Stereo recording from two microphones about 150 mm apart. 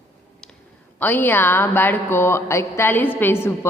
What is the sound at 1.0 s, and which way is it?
A woman's voice, 10° left (ahead or behind).